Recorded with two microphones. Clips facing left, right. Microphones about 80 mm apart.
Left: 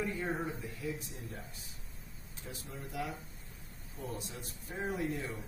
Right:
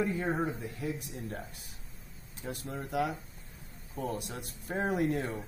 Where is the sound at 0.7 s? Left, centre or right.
Right.